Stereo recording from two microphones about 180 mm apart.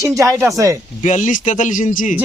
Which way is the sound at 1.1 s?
45° left (ahead or behind).